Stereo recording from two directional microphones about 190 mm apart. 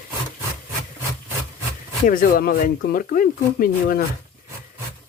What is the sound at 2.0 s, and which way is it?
Speech, 45° left (ahead or behind).